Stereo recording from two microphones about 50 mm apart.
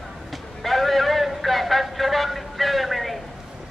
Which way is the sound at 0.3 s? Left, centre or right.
Centre.